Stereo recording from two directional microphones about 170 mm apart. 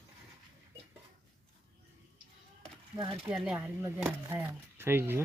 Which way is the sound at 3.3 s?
5° right (ahead or behind).